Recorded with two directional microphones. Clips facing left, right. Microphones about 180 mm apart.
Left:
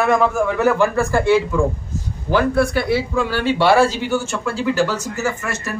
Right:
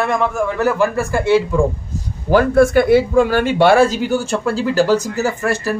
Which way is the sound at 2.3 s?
45° right (ahead or behind).